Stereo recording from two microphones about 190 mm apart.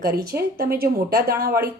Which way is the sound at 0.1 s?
55° right (ahead or behind).